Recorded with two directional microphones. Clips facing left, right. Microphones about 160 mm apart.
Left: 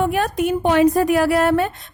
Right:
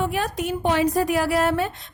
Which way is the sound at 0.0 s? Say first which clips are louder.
Left 6 dB; 55° left (ahead or behind).